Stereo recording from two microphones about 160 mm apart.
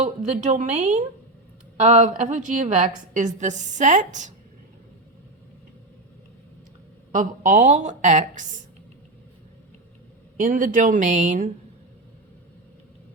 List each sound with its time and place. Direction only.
0.0 s a woman's voice: 50° right (ahead or behind)
7.1 s a woman's voice: 55° right (ahead or behind)
10.3 s a woman's voice: 55° right (ahead or behind)